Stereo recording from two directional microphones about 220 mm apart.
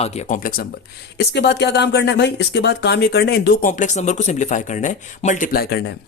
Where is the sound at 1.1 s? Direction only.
50° left (ahead or behind).